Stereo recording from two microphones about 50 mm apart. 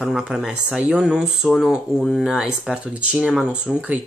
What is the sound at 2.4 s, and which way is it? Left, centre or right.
Speech, centre.